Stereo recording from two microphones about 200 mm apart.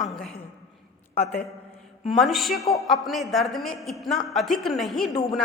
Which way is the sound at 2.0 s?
Centre (ahead or behind).